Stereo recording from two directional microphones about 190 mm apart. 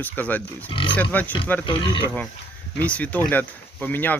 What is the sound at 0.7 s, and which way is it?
Speech, 25° left (ahead or behind).